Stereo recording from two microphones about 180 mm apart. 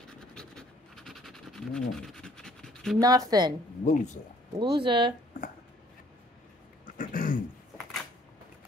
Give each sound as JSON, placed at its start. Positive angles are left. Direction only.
{"t": 0.3, "sound": "pant", "side_deg": 5}
{"t": 3.0, "sound": "speech", "side_deg": -20}
{"t": 3.8, "sound": "speech", "side_deg": 40}
{"t": 4.6, "sound": "speech", "side_deg": -30}
{"t": 7.0, "sound": "throat clearing", "side_deg": 50}